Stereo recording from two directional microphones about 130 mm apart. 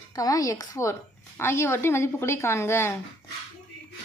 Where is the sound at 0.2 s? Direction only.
25° left (ahead or behind).